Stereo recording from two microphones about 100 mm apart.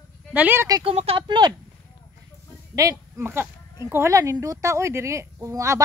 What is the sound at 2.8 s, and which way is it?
Speech, 30° right (ahead or behind).